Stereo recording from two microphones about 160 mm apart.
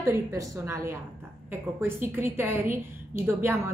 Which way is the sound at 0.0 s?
15° right (ahead or behind).